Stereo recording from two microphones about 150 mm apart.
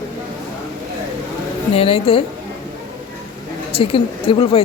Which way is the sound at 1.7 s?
40° left (ahead or behind).